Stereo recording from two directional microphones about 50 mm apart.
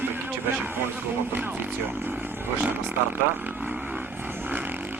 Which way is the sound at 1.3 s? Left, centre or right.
Right.